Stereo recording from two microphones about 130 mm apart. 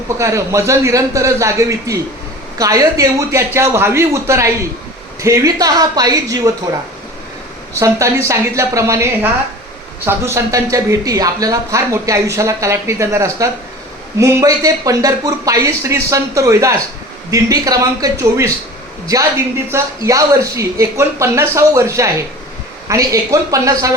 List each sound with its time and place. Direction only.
0.2 s speech: 25° right (ahead or behind)
7.7 s speech: 25° right (ahead or behind)
10.1 s speech: 20° right (ahead or behind)
19.7 s speech: 25° right (ahead or behind)